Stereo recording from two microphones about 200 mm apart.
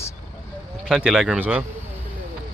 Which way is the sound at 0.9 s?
5° right (ahead or behind).